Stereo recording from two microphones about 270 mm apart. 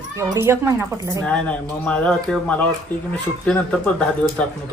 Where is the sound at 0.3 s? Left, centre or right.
Centre.